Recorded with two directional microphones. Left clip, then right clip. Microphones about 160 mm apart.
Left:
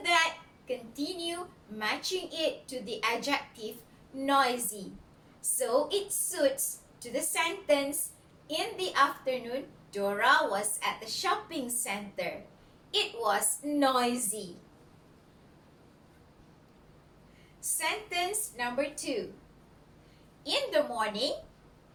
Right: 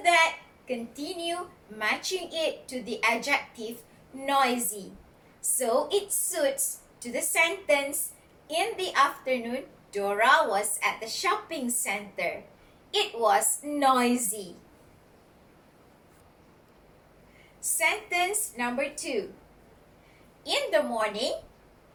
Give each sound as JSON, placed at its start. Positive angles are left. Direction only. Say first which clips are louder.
{"t": 0.0, "sound": "child singing", "louder": "right 5 dB", "side_deg": 20}
{"t": 0.9, "sound": "a woman's voice", "louder": "right 3 dB", "side_deg": 20}
{"t": 5.5, "sound": "a woman's voice", "louder": "right 3 dB", "side_deg": 20}
{"t": 17.6, "sound": "a woman's voice", "louder": "right 6 dB", "side_deg": 20}
{"t": 20.4, "sound": "a woman's voice", "louder": "right 3 dB", "side_deg": 20}